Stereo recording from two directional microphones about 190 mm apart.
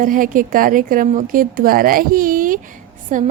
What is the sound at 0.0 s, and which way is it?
A woman's voice, 45° right (ahead or behind).